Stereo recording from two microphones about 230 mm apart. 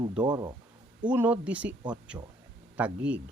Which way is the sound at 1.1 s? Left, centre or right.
Centre.